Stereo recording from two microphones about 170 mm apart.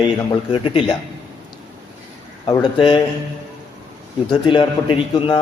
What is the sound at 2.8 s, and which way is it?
Speech, 30° left (ahead or behind).